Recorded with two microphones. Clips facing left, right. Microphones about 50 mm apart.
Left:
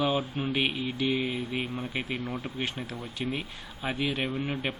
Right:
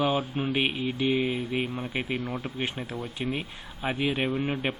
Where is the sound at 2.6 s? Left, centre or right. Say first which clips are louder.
Right 2 dB; centre.